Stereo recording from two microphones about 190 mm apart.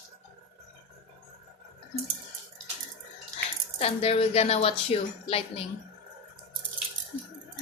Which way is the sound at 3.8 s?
30° left (ahead or behind).